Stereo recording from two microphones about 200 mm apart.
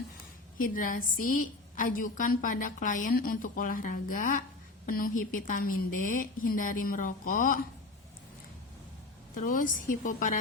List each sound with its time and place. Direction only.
0.6 s a woman's voice: 45° left (ahead or behind)
9.3 s a woman's voice: 40° left (ahead or behind)